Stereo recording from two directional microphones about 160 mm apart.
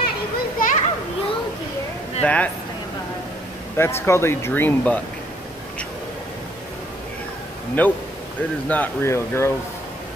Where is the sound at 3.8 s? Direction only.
15° left (ahead or behind).